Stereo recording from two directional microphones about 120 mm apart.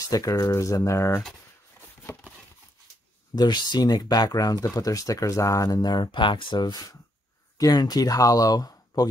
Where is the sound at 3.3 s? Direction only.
35° left (ahead or behind).